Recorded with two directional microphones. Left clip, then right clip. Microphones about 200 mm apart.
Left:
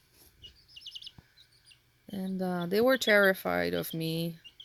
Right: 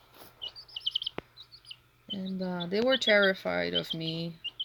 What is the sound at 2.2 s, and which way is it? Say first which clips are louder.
Speech: left 3 dB; 45° left (ahead or behind).